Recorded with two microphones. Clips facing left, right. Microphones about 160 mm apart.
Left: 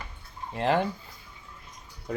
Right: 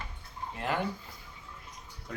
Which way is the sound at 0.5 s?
30° left (ahead or behind).